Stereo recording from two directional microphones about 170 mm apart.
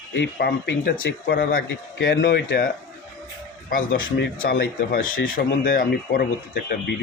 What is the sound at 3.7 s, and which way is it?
Speech, 55° left (ahead or behind).